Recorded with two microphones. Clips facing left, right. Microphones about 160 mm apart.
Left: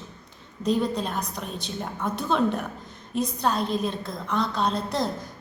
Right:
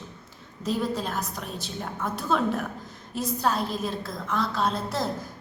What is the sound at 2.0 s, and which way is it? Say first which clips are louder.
Speech: left 2 dB; 20° left (ahead or behind).